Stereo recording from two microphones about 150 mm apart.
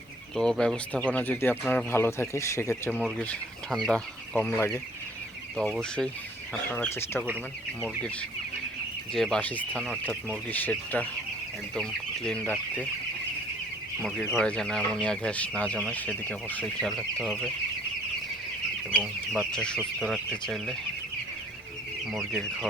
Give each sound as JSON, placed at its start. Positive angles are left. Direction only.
{"t": 0.3, "sound": "speech", "side_deg": 5}
{"t": 5.5, "sound": "speech", "side_deg": 0}
{"t": 9.1, "sound": "speech", "side_deg": 5}
{"t": 14.3, "sound": "speech", "side_deg": 5}
{"t": 17.2, "sound": "speech", "side_deg": 0}
{"t": 18.9, "sound": "speech", "side_deg": 10}
{"t": 22.1, "sound": "speech", "side_deg": 0}